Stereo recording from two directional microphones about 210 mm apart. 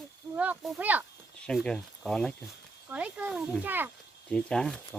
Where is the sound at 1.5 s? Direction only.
5° left (ahead or behind).